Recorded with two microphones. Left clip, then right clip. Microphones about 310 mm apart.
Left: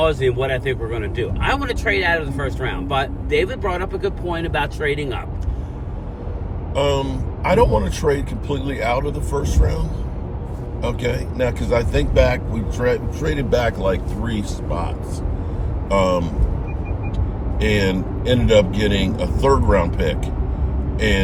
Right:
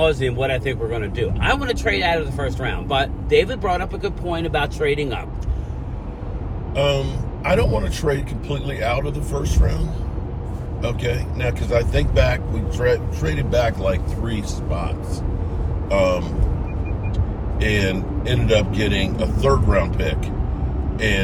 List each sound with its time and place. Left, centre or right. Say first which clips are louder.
0.3 s speech: left 2 dB; centre
6.7 s a man's voice: left 1 dB; centre
10.8 s a man's voice: left 2 dB; centre
15.9 s a man's voice: left 1 dB; centre
17.6 s a man's voice: left 2 dB; centre